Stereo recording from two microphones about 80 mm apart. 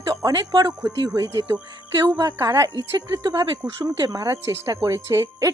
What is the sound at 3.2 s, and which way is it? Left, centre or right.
A woman's voice, right.